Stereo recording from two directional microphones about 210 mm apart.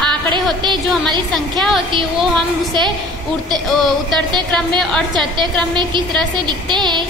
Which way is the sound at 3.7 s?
Centre (ahead or behind).